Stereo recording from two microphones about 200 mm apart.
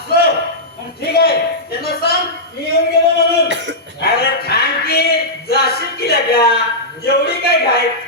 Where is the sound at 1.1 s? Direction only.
50° left (ahead or behind).